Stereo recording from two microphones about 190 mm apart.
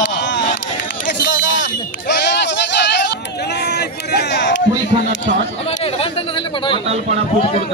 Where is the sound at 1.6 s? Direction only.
65° left (ahead or behind).